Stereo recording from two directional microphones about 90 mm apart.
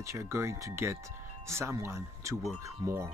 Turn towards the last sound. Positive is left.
turn(degrees=-30)  # may be behind; listen again after turning